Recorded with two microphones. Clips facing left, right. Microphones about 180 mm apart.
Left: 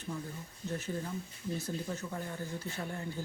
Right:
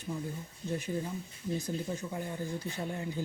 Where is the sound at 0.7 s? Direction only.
15° right (ahead or behind).